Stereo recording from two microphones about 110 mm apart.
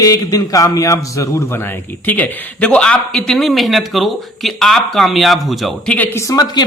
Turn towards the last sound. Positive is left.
turn(degrees=35)  # may be behind; listen again after turning